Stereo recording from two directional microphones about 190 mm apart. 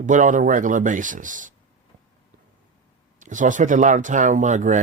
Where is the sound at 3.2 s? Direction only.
40° right (ahead or behind).